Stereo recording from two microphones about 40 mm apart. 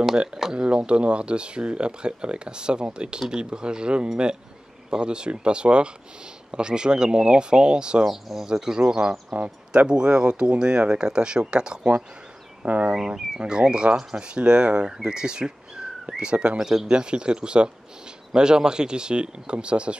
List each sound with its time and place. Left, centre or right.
0.1 s speech: centre
8.0 s speech: centre
8.5 s speech: centre
9.3 s speech: right
12.6 s speech: right
12.9 s speech: centre
13.4 s speech: right
16.9 s speech: right